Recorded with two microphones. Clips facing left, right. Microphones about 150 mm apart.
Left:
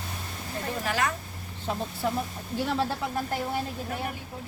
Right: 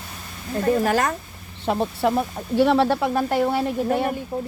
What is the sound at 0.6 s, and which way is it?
Speech, 45° right (ahead or behind).